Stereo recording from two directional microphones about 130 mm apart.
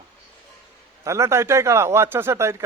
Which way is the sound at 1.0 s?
20° right (ahead or behind).